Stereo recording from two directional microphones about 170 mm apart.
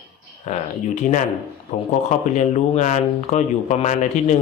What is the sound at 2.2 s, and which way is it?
Speech, 45° left (ahead or behind).